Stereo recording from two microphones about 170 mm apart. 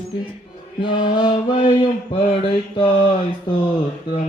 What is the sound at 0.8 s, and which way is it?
Mantra, 30° left (ahead or behind).